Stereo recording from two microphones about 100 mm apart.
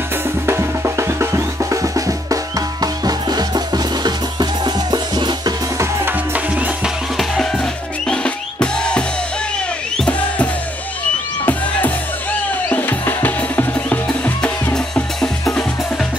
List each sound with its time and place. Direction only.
0.5 s drum: 25° right (ahead or behind); by 5.5 s 45° right (ahead or behind)
6.3 s music: 15° right (ahead or behind)
7.2 s music: 5° left (ahead or behind)
8.1 s drum: 10° left (ahead or behind)
9.9 s music: 10° left (ahead or behind)